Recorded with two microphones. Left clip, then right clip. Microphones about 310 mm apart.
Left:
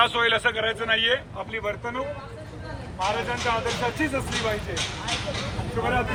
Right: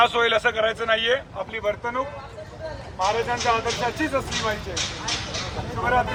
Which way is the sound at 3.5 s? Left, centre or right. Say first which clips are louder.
Right 4 dB; right.